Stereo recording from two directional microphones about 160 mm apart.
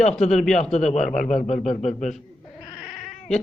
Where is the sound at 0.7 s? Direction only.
45° left (ahead or behind).